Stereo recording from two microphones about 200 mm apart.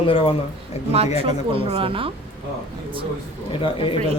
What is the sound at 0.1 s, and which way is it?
Speech, 25° left (ahead or behind).